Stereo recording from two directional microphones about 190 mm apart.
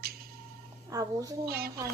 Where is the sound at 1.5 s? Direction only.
55° right (ahead or behind).